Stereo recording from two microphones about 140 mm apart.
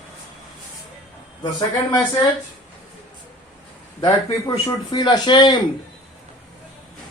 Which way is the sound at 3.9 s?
30° left (ahead or behind).